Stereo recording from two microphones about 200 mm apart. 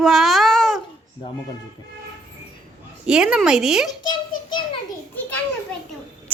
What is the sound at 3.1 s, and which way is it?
Speech, 5° right (ahead or behind).